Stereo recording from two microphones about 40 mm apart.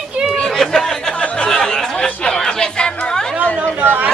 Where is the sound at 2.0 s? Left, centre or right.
Centre.